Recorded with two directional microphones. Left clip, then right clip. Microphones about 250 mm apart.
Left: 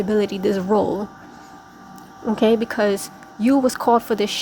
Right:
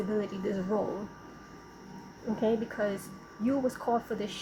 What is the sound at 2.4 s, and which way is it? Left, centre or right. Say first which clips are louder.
A woman's voice: left 12 dB; left.